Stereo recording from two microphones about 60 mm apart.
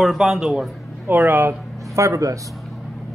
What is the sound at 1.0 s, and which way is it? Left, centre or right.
Speech, right.